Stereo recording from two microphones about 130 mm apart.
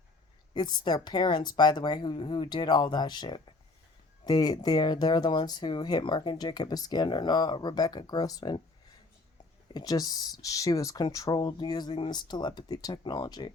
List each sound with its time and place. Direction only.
0.5 s speech: 35° left (ahead or behind)
9.7 s speech: 30° left (ahead or behind)